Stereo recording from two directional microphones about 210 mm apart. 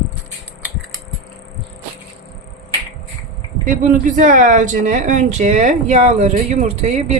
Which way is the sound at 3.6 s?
40° right (ahead or behind).